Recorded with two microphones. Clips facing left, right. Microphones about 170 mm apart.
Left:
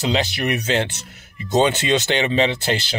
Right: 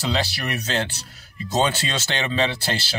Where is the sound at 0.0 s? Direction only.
20° left (ahead or behind).